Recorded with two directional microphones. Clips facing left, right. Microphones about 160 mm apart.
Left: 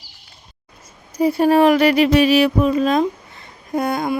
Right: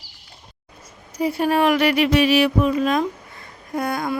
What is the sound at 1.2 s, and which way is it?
Speech, 35° left (ahead or behind).